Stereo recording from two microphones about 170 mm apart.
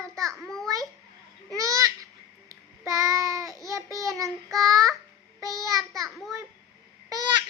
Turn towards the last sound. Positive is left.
turn(degrees=-25)  # may be behind; listen again after turning